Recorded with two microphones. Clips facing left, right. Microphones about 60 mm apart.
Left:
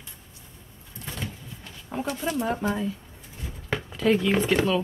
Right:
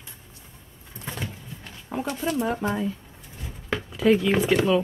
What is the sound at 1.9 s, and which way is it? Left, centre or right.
Speech, centre.